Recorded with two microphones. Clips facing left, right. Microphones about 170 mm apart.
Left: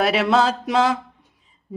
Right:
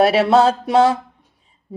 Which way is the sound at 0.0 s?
30° right (ahead or behind).